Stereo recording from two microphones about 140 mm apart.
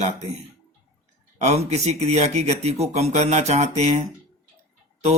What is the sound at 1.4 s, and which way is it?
Speech, 55° right (ahead or behind).